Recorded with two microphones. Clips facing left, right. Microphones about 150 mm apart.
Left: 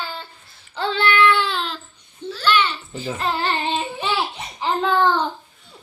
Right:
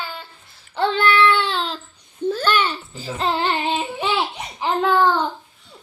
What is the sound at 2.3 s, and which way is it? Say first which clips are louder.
Babbling: right 1 dB; 45° right (ahead or behind).